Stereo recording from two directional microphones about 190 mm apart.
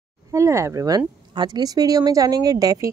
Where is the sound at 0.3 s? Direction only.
15° right (ahead or behind).